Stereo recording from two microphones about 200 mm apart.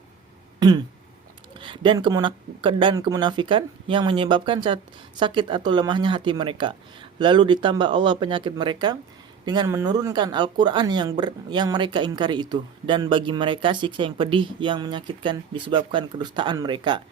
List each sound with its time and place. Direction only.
1.5 s speech: 25° right (ahead or behind)